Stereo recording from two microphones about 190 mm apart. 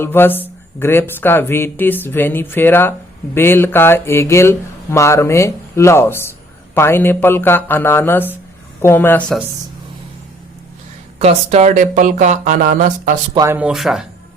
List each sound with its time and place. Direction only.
0.0 s speech: 10° left (ahead or behind)
11.2 s speech: 35° right (ahead or behind)
13.3 s speech: 20° right (ahead or behind)
13.6 s speech: 5° right (ahead or behind)